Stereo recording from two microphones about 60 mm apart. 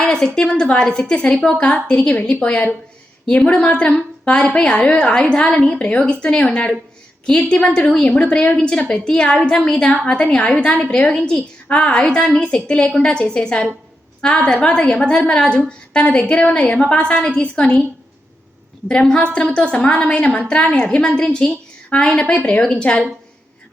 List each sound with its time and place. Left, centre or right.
0.0 s a sound: centre
0.3 s a woman's voice: centre
18.9 s a woman's voice: centre